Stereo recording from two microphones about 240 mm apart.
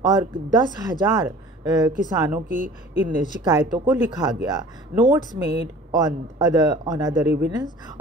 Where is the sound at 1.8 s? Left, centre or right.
Centre.